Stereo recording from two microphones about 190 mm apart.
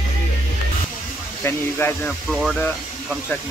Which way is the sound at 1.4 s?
10° left (ahead or behind).